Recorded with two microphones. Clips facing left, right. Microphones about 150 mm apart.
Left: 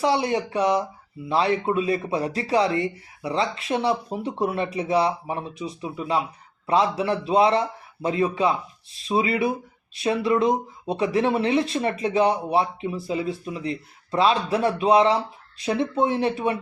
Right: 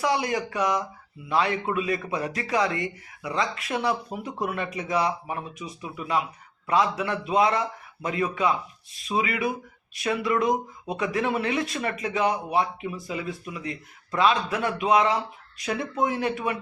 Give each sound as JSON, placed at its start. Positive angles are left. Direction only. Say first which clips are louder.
{"t": 0.0, "sound": "speech", "louder": "left 3 dB", "side_deg": 30}